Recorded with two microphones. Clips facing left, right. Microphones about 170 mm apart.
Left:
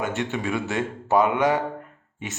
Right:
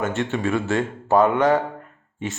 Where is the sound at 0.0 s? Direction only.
15° left (ahead or behind).